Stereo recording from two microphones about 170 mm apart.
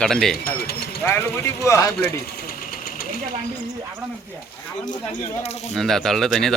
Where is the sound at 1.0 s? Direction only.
15° left (ahead or behind).